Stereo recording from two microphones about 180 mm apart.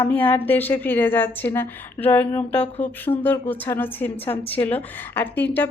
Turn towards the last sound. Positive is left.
turn(degrees=10)  # may be behind; listen again after turning